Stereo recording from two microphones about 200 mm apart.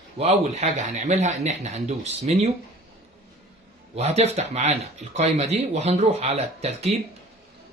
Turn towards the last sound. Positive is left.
turn(degrees=-30)  # may be behind; listen again after turning